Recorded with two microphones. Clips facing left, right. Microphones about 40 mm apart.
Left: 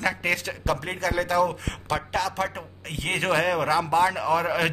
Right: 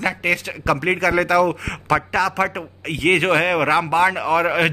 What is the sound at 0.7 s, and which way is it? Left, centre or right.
A man's voice, right.